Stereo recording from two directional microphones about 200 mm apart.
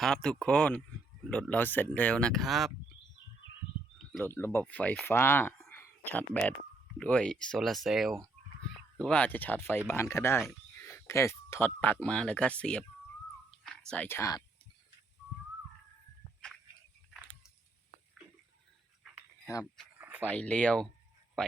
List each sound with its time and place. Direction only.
0.0 s speech: 5° left (ahead or behind)
3.9 s speech: 5° left (ahead or behind)
13.5 s whispering: 5° left (ahead or behind)
20.0 s a sound: 5° right (ahead or behind)
20.2 s speech: 5° left (ahead or behind)